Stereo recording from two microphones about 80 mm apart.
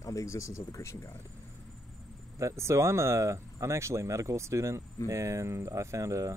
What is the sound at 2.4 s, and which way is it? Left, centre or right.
Speech, right.